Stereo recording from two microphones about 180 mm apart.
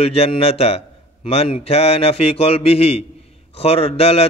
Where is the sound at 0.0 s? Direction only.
35° left (ahead or behind).